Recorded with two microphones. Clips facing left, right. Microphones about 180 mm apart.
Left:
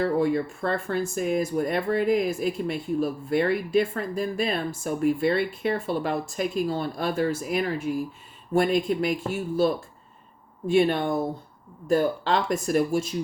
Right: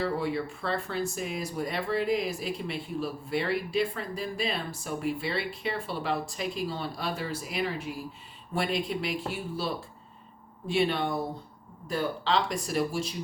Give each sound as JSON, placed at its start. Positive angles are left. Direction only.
{"t": 0.0, "sound": "speech", "side_deg": 45}